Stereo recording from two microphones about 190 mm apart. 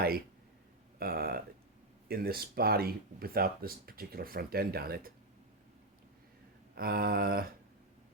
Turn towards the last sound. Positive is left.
turn(degrees=-50)  # may be behind; listen again after turning